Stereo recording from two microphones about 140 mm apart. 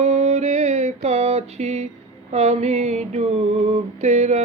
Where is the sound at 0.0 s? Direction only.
50° right (ahead or behind).